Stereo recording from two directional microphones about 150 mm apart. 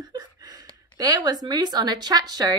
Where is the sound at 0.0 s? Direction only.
25° right (ahead or behind).